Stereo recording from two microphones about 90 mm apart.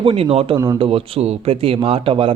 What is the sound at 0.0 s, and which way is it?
Speech, 85° right.